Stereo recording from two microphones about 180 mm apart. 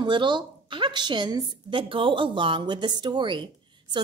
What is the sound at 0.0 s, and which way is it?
A woman's voice, 25° right (ahead or behind).